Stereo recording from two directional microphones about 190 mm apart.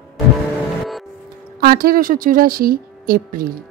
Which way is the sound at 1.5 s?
50° right (ahead or behind).